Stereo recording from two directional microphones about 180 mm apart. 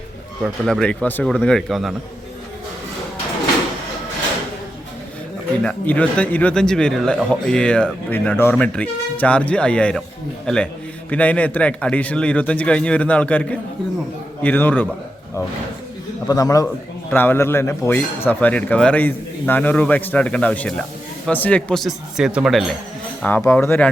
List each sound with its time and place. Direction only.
0.4 s a man's voice: centre (ahead or behind)
5.6 s a man's voice: 5° left (ahead or behind)
16.3 s a man's voice: 20° left (ahead or behind)